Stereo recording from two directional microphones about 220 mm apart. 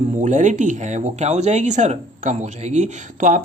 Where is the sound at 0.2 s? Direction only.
35° right (ahead or behind).